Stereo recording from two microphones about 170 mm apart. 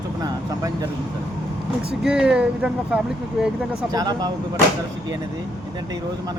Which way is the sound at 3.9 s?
25° right (ahead or behind).